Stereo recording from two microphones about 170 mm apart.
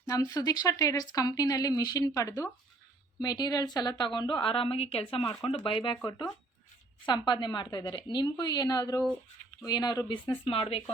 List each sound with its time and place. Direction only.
0.0 s speech: 20° left (ahead or behind)
7.0 s speech: 25° left (ahead or behind)